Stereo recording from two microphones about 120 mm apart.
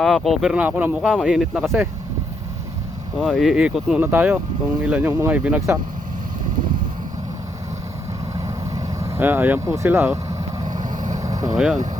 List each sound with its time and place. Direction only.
0.0 s speech: centre (ahead or behind)
1.1 s speech: centre (ahead or behind)
3.2 s speech: centre (ahead or behind)
8.4 s vehicle: 25° right (ahead or behind)
10.8 s vehicle: 90° right
11.2 s vehicle: 30° right (ahead or behind)
11.5 s speech: centre (ahead or behind)